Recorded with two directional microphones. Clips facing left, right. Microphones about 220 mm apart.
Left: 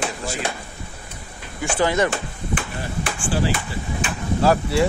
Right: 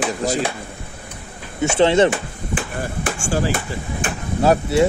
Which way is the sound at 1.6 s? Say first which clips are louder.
Right 6 dB; 25° right (ahead or behind).